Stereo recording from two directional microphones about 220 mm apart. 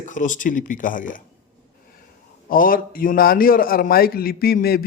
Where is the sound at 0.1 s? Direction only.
35° left (ahead or behind).